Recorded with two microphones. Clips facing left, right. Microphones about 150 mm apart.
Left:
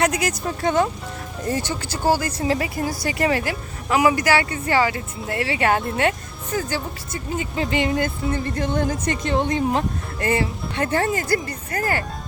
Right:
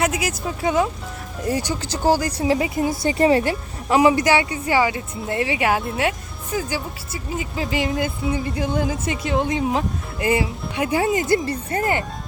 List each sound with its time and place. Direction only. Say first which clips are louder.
0.0 s speech: left 1 dB; 5° right (ahead or behind)
10.2 s speech: right 1 dB; 10° right (ahead or behind)